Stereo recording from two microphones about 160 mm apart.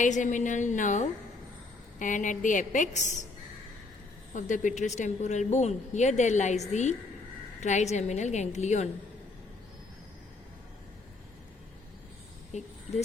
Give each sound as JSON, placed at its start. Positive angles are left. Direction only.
{"t": 0.0, "sound": "a woman's voice", "side_deg": 50}
{"t": 4.4, "sound": "a woman's voice", "side_deg": 50}
{"t": 12.5, "sound": "a woman's voice", "side_deg": 45}